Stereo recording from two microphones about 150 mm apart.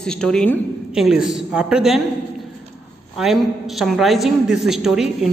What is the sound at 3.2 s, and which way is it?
A man's voice, centre (ahead or behind).